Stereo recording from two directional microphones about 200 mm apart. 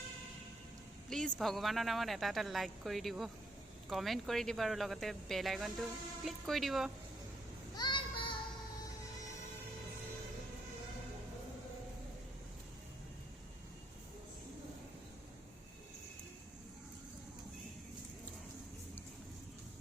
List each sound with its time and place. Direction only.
1.1 s speech: centre (ahead or behind)
7.8 s child singing: 25° left (ahead or behind)